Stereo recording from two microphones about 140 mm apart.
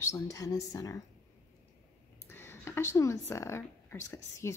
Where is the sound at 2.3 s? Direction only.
15° left (ahead or behind).